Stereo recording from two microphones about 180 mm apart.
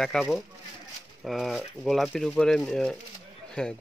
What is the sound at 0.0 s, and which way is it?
Speech, centre (ahead or behind).